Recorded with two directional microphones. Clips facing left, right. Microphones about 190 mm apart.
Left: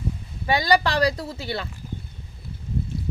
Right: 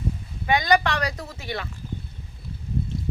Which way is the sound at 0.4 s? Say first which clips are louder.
Even; 35° left (ahead or behind).